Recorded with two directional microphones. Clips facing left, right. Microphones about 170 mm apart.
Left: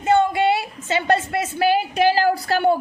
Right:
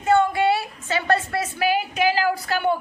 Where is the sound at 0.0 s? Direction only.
20° left (ahead or behind).